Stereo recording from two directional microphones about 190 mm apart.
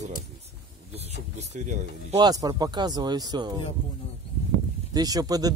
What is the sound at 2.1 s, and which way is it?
Speech, 20° right (ahead or behind).